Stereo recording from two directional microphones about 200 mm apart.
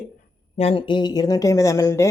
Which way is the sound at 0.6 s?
25° left (ahead or behind).